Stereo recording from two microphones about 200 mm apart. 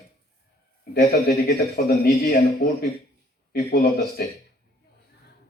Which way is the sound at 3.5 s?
50° left (ahead or behind).